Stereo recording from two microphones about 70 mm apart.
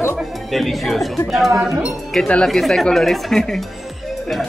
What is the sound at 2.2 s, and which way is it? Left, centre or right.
Speech, centre.